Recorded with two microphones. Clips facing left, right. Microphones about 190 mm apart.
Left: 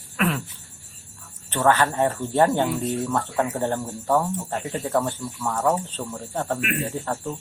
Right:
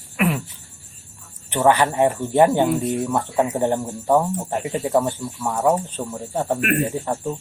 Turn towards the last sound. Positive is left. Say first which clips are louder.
# right 4 dB
turn(degrees=-15)  # may be behind; listen again after turning